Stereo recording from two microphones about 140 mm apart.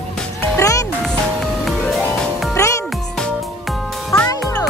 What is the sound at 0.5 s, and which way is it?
Music, 25° left (ahead or behind).